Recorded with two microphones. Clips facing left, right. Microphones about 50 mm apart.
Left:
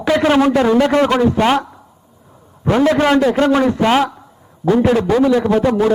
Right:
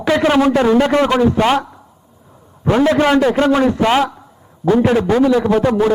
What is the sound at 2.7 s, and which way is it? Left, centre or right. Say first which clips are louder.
A man's voice: even; centre.